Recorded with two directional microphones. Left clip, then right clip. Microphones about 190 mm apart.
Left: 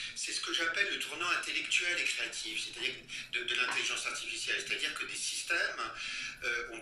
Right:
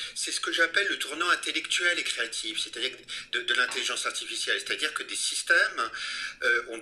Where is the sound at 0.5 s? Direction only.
45° right (ahead or behind).